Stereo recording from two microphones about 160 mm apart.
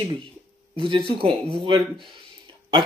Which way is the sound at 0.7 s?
35° right (ahead or behind).